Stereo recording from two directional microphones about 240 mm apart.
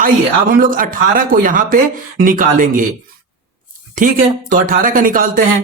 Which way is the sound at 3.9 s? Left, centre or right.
Right.